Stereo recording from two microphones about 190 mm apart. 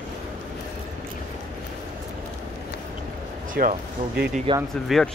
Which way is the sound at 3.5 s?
45° right (ahead or behind).